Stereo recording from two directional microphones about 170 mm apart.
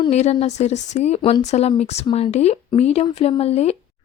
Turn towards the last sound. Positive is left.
turn(degrees=40)  # may be behind; listen again after turning